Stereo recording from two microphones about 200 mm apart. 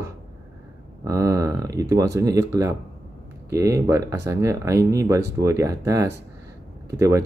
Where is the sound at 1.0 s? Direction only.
15° right (ahead or behind).